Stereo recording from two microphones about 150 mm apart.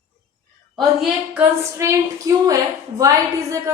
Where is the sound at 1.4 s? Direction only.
20° right (ahead or behind).